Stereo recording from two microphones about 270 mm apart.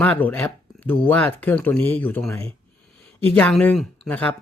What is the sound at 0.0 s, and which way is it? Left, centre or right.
Speech, centre.